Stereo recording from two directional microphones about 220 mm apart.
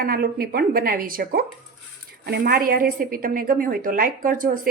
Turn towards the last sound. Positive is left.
turn(degrees=-40)  # may be behind; listen again after turning